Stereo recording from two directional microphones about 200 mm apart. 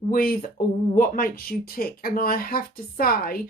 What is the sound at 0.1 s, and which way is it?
Speech, 45° left (ahead or behind).